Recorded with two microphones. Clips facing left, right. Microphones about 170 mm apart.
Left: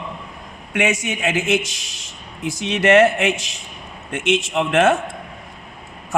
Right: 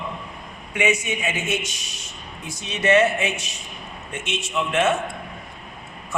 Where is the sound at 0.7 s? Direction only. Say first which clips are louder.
Left 2 dB; 90° left.